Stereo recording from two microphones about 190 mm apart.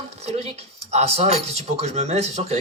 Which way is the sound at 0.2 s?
35° right (ahead or behind).